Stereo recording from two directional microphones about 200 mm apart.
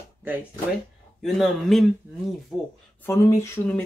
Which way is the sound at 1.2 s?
Centre (ahead or behind).